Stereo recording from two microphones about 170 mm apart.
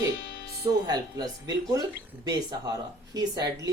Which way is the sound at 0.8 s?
25° right (ahead or behind).